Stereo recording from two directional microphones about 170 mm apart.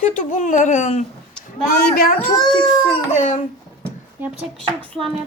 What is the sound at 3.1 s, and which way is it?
Speech, 45° left (ahead or behind).